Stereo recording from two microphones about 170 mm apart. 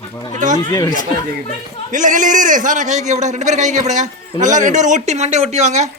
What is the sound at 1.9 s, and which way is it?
A man's voice, 50° right (ahead or behind).